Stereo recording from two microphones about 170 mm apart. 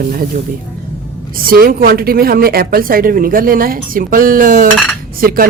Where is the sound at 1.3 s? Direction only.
60° right (ahead or behind).